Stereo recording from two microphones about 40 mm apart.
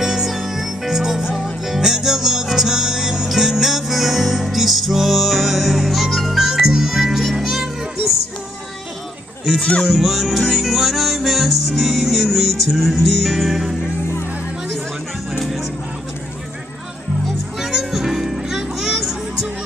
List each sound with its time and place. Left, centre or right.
0.0 s music: centre
9.6 s speech: left
9.8 s music: centre
15.3 s music: centre
17.6 s music: centre